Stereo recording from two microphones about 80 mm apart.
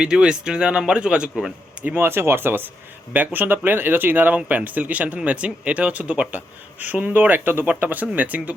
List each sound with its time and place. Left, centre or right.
0.0 s speech: centre
2.0 s speech: right